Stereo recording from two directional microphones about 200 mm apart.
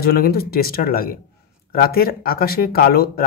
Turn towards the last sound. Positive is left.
turn(degrees=50)  # may be behind; listen again after turning